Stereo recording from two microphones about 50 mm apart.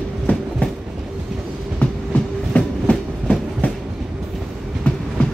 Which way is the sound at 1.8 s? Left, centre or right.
Left.